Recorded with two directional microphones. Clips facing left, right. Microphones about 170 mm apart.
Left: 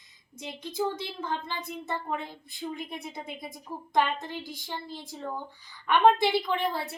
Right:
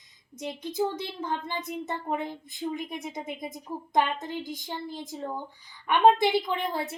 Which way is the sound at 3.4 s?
15° right (ahead or behind).